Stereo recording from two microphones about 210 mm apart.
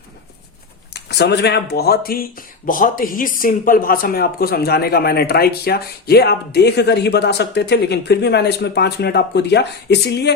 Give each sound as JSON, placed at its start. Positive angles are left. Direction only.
{"t": 0.9, "sound": "speech", "side_deg": 50}